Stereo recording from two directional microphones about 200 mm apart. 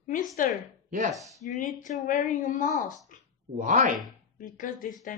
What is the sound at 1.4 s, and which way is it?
Speech, 40° left (ahead or behind).